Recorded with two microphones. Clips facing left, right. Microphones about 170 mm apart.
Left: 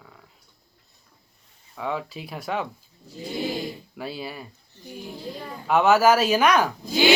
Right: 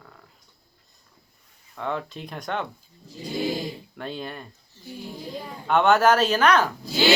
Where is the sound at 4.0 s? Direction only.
5° left (ahead or behind).